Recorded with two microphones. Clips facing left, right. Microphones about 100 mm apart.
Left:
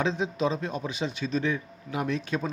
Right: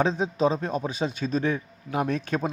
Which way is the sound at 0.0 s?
40° right (ahead or behind).